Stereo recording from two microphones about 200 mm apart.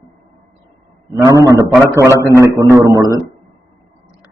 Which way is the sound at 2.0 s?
15° right (ahead or behind).